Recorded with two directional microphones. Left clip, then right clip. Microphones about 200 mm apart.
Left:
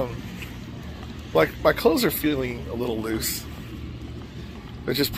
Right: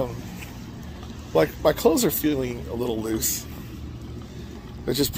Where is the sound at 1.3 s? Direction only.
15° right (ahead or behind).